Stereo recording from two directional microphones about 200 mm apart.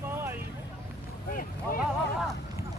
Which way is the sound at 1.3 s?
45° left (ahead or behind).